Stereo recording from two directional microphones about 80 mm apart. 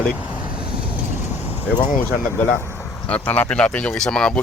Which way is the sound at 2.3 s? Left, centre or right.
Left.